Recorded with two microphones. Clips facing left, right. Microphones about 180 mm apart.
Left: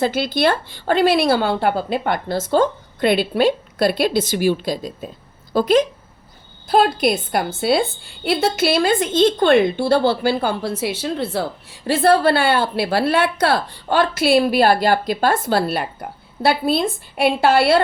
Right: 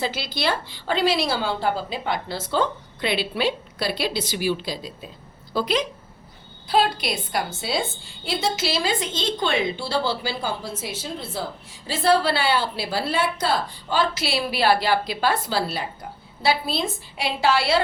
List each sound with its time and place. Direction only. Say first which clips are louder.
0.0 s a woman's voice: left 8 dB; 50° left (ahead or behind)